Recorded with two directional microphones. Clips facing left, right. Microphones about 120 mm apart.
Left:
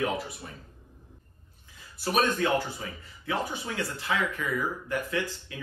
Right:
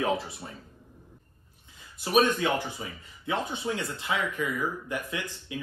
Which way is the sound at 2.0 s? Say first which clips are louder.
Right 2 dB; 15° right (ahead or behind).